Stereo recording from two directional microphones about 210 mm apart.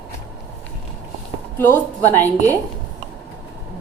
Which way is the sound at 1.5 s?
10° left (ahead or behind).